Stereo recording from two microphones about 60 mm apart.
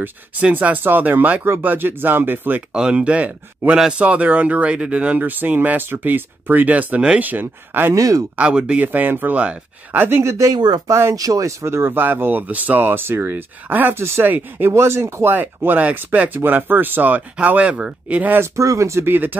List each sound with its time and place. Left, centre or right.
0.0 s speech: right
2.7 s speech: centre
7.2 s speech: right
7.9 s speech: right
8.4 s speech: centre
8.8 s speech: right
9.9 s speech: right
11.1 s speech: right
11.6 s speech: right
14.7 s speech: right
15.3 s speech: right
18.4 s speech: right
19.0 s speech: right